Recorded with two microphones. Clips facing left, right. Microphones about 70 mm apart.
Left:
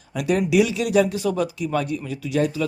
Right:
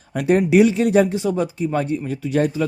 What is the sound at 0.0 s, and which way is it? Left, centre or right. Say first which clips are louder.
A man's voice: right 4 dB; right.